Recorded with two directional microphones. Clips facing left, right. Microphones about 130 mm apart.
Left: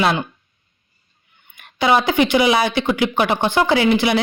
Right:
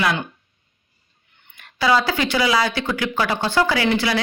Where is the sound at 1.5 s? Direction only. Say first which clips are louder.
Left 2 dB; 20° left (ahead or behind).